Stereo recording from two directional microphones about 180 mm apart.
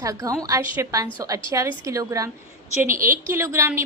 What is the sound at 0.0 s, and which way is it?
A woman's voice, 20° right (ahead or behind).